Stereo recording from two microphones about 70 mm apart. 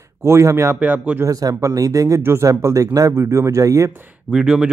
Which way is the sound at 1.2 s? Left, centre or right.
Right.